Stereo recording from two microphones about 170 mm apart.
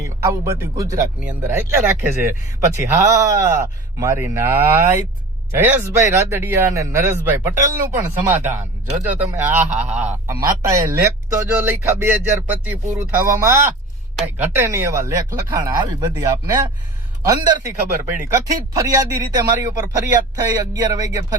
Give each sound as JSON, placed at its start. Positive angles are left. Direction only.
{"t": 0.0, "sound": "speech", "side_deg": -20}